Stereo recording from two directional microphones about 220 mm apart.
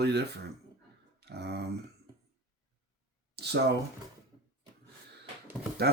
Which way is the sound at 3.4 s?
50° right (ahead or behind).